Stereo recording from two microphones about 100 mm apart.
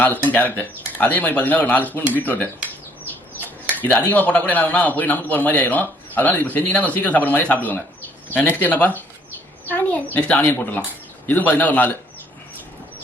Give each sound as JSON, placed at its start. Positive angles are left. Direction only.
{"t": 0.0, "sound": "speech", "side_deg": 15}
{"t": 3.8, "sound": "speech", "side_deg": 20}